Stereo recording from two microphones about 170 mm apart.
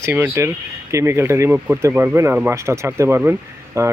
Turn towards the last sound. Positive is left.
turn(degrees=-20)  # may be behind; listen again after turning